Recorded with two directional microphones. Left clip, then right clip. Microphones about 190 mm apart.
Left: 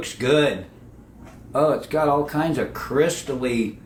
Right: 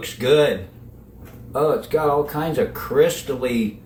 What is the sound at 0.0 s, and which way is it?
Speech, 30° left (ahead or behind).